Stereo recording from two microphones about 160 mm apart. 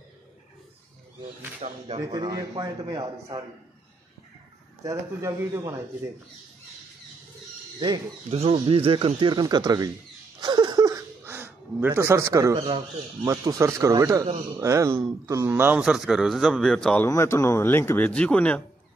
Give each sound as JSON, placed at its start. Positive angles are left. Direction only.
{"t": 1.6, "sound": "speech", "side_deg": -50}
{"t": 2.1, "sound": "speech", "side_deg": -25}
{"t": 4.8, "sound": "speech", "side_deg": -20}
{"t": 7.8, "sound": "speech", "side_deg": -35}
{"t": 10.4, "sound": "a sound", "side_deg": -25}
{"t": 12.5, "sound": "speech", "side_deg": -35}
{"t": 13.2, "sound": "a man's voice", "side_deg": -20}
{"t": 17.1, "sound": "speech", "side_deg": 15}